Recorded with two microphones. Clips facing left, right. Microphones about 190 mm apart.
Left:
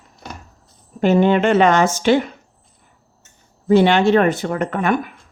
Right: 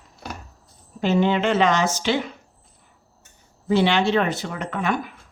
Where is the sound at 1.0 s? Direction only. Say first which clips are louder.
Left 5 dB; 55° left (ahead or behind).